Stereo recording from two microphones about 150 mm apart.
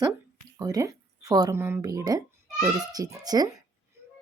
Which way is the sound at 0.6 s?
25° right (ahead or behind).